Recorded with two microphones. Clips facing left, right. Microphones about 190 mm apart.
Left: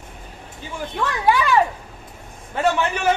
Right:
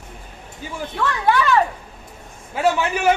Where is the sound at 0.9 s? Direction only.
10° left (ahead or behind).